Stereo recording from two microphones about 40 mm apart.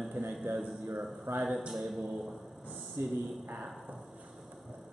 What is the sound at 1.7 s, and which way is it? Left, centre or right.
Speech, centre.